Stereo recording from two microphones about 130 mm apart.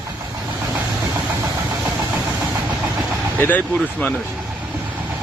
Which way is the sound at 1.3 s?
25° right (ahead or behind).